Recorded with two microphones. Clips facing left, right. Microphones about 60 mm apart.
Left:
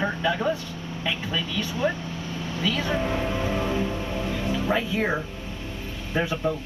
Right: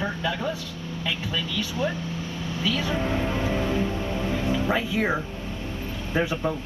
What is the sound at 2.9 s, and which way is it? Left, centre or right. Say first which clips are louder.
Speech: even; centre.